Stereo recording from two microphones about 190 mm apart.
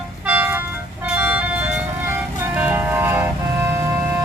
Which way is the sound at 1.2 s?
10° right (ahead or behind).